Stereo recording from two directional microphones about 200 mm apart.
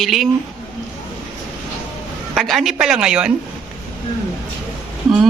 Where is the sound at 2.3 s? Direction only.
Centre (ahead or behind).